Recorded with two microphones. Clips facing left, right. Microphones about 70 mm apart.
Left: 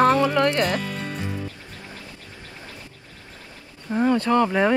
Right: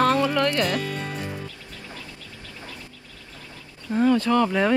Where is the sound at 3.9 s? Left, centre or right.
Left.